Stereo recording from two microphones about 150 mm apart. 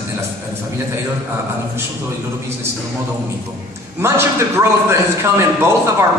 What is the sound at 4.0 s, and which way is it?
A man's voice, 15° right (ahead or behind).